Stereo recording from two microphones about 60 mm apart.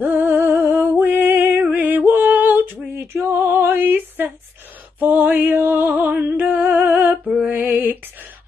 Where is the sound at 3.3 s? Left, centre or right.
Right.